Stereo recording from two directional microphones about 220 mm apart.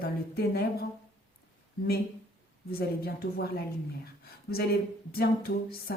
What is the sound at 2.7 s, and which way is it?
Speech, 45° left (ahead or behind).